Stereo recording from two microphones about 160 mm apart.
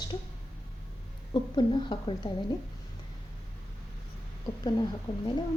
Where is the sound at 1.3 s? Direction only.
30° left (ahead or behind).